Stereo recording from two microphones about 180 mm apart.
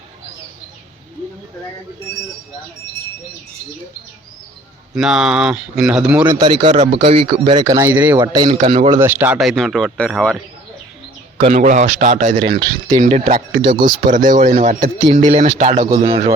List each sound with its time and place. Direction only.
4.9 s speech: 5° right (ahead or behind)
6.4 s a man's voice: 25° right (ahead or behind)
6.7 s a man's voice: 45° right (ahead or behind)
6.9 s a man's voice: 30° right (ahead or behind)
8.9 s speech: 15° right (ahead or behind); by 10.3 s 5° left (ahead or behind)
11.3 s a man's voice: 35° right (ahead or behind)
12.5 s a man's voice: 25° right (ahead or behind)
13.0 s a man's voice: 40° right (ahead or behind)
13.7 s a man's voice: 25° right (ahead or behind)
14.1 s a man's voice: 45° right (ahead or behind); by 16.3 s 30° right (ahead or behind)